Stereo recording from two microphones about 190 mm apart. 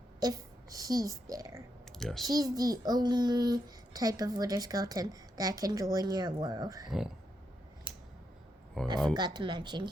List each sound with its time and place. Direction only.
0.2 s speech: 20° right (ahead or behind)
2.0 s speech: centre (ahead or behind)
2.3 s a child's voice: 20° right (ahead or behind)
8.8 s speech: centre (ahead or behind)
9.1 s a child's voice: 20° right (ahead or behind)